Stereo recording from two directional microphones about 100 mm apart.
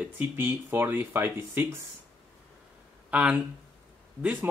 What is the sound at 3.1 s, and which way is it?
Speech, 10° right (ahead or behind).